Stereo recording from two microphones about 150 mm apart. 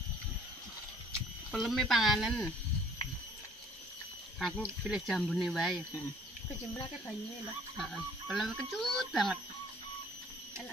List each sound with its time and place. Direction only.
1.5 s speech: centre (ahead or behind)
4.4 s speech: centre (ahead or behind)
7.7 s speech: centre (ahead or behind)